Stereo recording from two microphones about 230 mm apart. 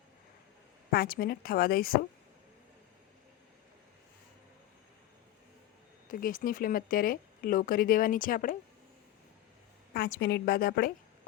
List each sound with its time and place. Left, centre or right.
0.9 s speech: left
6.1 s speech: left
9.9 s speech: left